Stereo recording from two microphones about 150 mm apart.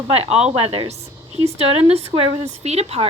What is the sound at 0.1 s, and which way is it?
A woman's voice, 45° right (ahead or behind).